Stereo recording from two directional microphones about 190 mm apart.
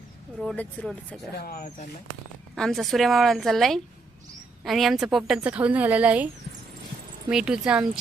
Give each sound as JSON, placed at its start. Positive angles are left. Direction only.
{"t": 0.3, "sound": "a woman's voice", "side_deg": 5}
{"t": 1.4, "sound": "speech", "side_deg": 50}
{"t": 2.6, "sound": "a woman's voice", "side_deg": 0}
{"t": 7.3, "sound": "a woman's voice", "side_deg": -5}